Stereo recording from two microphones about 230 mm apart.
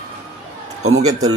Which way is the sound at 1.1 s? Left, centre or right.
Centre.